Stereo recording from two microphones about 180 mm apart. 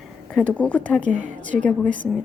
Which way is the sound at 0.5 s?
10° left (ahead or behind).